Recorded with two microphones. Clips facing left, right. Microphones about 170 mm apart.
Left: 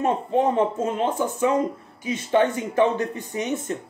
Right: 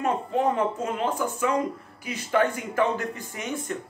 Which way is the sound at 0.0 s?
20° left (ahead or behind).